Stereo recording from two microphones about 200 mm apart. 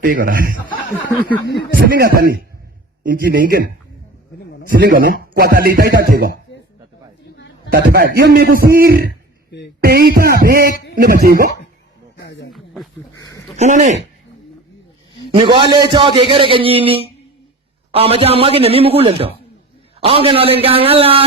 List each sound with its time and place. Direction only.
0.0 s speech: 45° right (ahead or behind)
1.8 s speech: 50° right (ahead or behind)
4.7 s speech: 45° right (ahead or behind)
7.7 s speech: 50° right (ahead or behind)
9.0 s guitar: 55° left (ahead or behind)
9.8 s speech: 50° right (ahead or behind)
12.1 s a sound: 60° left (ahead or behind)
12.5 s a sound: centre (ahead or behind)
13.6 s speech: 40° right (ahead or behind)
15.5 s a man's voice: 20° right (ahead or behind)